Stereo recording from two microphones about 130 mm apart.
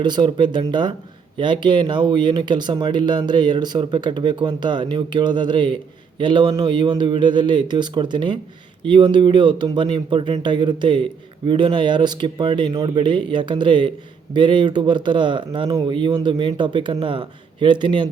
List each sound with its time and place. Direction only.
0.0 s speech: 35° right (ahead or behind)